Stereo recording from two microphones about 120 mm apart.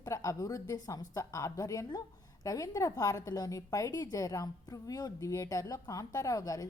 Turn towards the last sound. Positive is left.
turn(degrees=30)  # may be behind; listen again after turning